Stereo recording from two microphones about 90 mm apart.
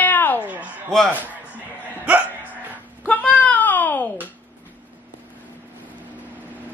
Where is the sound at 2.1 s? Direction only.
15° right (ahead or behind).